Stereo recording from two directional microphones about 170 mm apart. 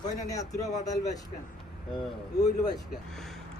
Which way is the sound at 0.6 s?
45° left (ahead or behind).